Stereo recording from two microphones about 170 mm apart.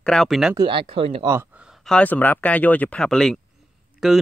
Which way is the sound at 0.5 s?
30° right (ahead or behind).